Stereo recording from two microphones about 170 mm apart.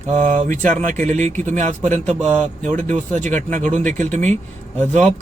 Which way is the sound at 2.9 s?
45° right (ahead or behind).